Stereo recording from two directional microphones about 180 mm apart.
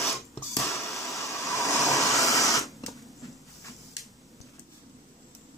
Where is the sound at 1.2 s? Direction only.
15° left (ahead or behind).